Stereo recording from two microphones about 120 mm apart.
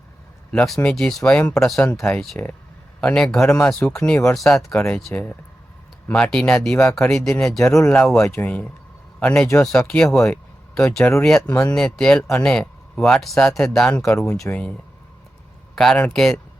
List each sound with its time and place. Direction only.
0.5 s a man's voice: 5° left (ahead or behind)
10.9 s speech: 25° left (ahead or behind)
11.2 s speech: 5° left (ahead or behind)
15.7 s speech: 5° left (ahead or behind)